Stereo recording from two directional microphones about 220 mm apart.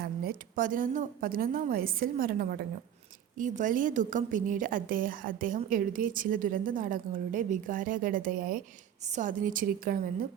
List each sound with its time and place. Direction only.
0.0 s a woman's voice: 40° right (ahead or behind)